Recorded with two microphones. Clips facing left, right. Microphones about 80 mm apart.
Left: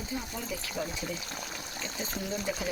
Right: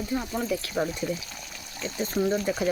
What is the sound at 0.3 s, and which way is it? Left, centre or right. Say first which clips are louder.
Speech: right 10 dB; right.